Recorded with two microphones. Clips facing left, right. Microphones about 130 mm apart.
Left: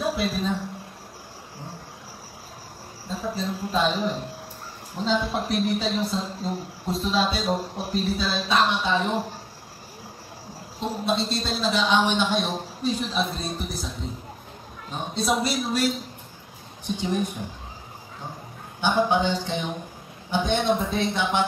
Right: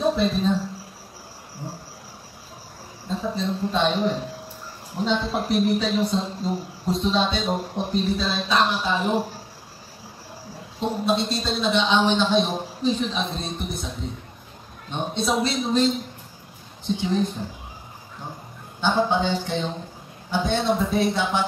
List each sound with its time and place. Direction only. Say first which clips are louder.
0.0 s speech: right 4 dB; 5° left (ahead or behind)
3.1 s speech: right 3 dB; 5° left (ahead or behind)
5.3 s speech: right 3 dB; centre (ahead or behind)
10.8 s speech: right 3 dB; centre (ahead or behind)
17.1 s speech: right 2 dB; 15° left (ahead or behind)
18.8 s speech: even; 15° left (ahead or behind)
21.0 s music: right 1 dB; 20° left (ahead or behind)